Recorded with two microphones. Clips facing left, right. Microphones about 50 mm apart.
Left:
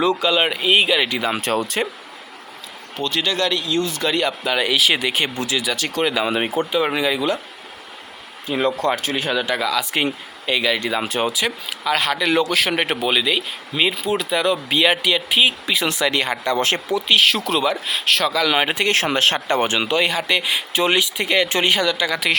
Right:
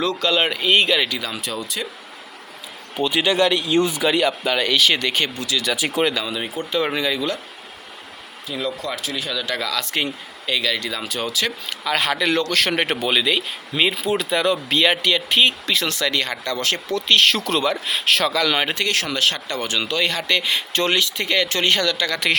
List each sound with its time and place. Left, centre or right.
0.0 s speech: centre
1.0 s speech: left
1.3 s speech: left
2.9 s speech: centre
3.9 s speech: centre
5.7 s speech: centre
6.2 s speech: left
6.7 s speech: centre
8.4 s speech: left
9.5 s speech: centre
11.3 s speech: centre
16.9 s speech: centre
18.8 s speech: left; by 22.3 s centre